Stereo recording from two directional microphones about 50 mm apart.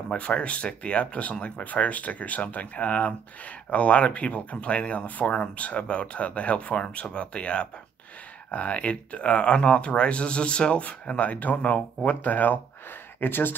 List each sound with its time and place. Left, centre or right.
0.1 s speech: left